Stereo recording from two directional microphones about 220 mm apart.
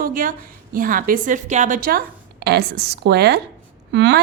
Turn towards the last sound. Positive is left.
turn(degrees=-50)  # may be behind; listen again after turning